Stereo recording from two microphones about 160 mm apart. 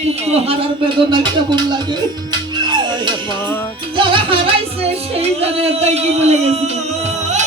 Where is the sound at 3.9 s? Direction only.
30° right (ahead or behind).